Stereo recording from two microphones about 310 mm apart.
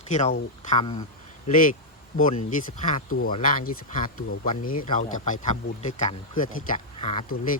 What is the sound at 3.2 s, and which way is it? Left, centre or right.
Speech, left.